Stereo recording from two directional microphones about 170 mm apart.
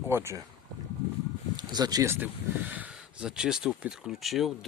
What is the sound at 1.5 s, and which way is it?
Speech, 25° right (ahead or behind).